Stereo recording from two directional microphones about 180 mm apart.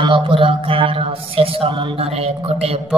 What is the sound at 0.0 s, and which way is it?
Mantra, 30° right (ahead or behind).